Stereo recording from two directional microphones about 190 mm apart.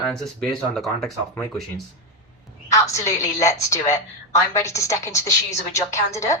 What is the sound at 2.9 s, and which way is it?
A woman's voice, 15° left (ahead or behind).